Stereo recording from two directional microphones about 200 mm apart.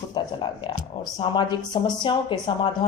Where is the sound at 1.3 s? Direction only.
20° left (ahead or behind).